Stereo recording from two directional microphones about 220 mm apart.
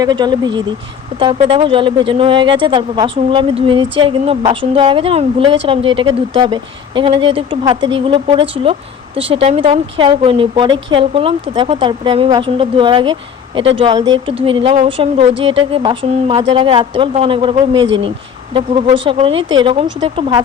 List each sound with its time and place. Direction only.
0.0 s a woman's voice: 20° right (ahead or behind)